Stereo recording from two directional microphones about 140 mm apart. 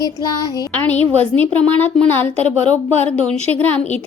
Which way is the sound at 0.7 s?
10° left (ahead or behind).